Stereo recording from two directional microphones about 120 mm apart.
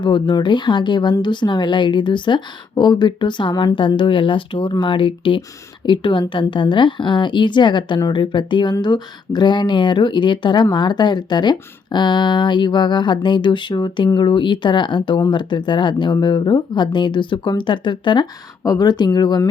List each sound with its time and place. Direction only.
0.0 s a woman's voice: 40° left (ahead or behind)